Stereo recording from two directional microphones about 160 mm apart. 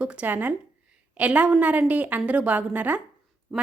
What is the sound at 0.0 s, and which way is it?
A woman's voice, 10° right (ahead or behind).